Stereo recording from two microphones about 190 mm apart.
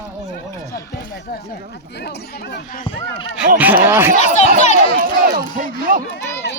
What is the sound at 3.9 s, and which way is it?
Speech, 10° right (ahead or behind).